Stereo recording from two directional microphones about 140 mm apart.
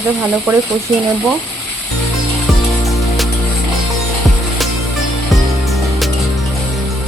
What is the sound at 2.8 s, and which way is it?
Music, centre (ahead or behind).